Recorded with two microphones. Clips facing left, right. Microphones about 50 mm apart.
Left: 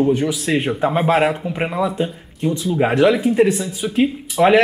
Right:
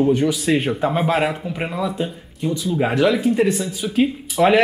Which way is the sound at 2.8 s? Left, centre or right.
Centre.